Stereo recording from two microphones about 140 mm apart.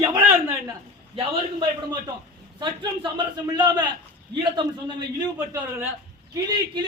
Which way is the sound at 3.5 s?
30° right (ahead or behind).